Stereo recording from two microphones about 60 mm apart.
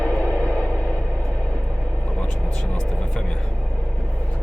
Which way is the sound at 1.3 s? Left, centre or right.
Centre.